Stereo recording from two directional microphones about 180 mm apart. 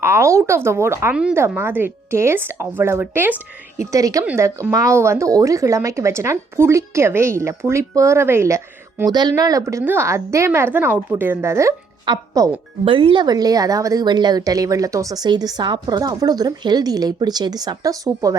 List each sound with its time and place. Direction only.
0.0 s a woman's voice: 15° right (ahead or behind)